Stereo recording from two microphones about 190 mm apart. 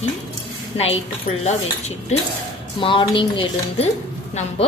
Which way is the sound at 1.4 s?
35° left (ahead or behind).